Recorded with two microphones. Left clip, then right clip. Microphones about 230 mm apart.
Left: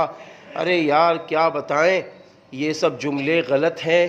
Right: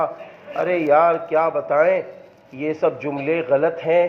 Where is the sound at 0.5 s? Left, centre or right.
Left.